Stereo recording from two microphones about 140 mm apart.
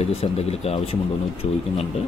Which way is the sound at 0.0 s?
45° left (ahead or behind).